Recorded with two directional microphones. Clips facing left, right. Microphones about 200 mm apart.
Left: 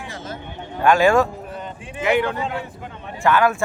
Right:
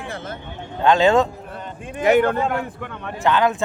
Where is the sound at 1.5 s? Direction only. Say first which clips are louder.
Even; 50° right (ahead or behind); by 3.1 s 65° right (ahead or behind).